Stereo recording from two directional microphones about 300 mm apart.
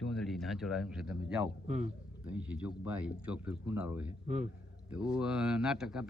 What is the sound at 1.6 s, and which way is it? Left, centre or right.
Speech, right.